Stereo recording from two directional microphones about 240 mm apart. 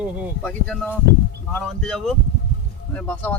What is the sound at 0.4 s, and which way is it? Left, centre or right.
Speech, centre.